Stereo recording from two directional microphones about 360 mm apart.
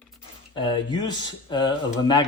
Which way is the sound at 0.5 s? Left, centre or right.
Centre.